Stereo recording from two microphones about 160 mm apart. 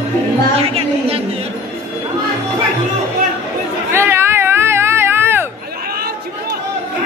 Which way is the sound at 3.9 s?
15° right (ahead or behind).